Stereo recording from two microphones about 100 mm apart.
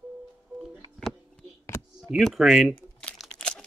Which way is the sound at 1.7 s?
25° left (ahead or behind).